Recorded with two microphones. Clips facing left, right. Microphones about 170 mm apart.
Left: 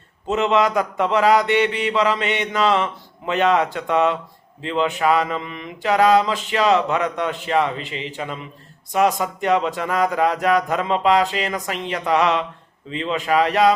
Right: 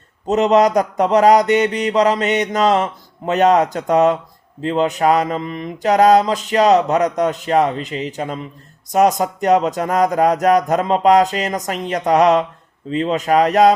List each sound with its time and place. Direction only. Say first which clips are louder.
0.3 s speech: right 5 dB; 40° right (ahead or behind)